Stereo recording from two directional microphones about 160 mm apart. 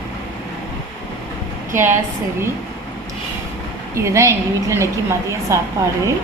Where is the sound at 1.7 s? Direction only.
15° right (ahead or behind).